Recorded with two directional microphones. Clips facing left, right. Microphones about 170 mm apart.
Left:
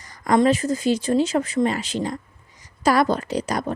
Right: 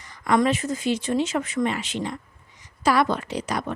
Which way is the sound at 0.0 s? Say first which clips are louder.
Left 2 dB; 40° left (ahead or behind).